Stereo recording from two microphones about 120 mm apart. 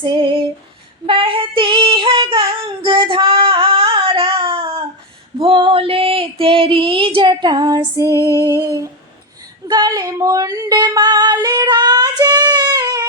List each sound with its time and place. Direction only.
0.0 s child singing: 45° right (ahead or behind)
5.4 s female singing: 45° right (ahead or behind); by 8.4 s 30° right (ahead or behind)
8.4 s humming: 30° right (ahead or behind)
9.6 s female singing: 35° right (ahead or behind)